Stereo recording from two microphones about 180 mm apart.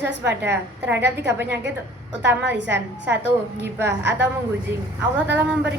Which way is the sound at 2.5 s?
75° right (ahead or behind).